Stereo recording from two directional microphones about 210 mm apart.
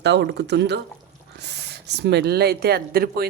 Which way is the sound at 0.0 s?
55° right (ahead or behind).